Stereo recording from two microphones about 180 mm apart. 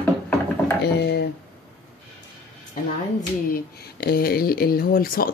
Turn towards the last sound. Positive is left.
turn(degrees=55)  # may be behind; listen again after turning